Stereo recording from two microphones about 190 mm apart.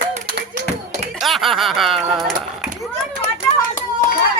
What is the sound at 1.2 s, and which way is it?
Speech, centre (ahead or behind).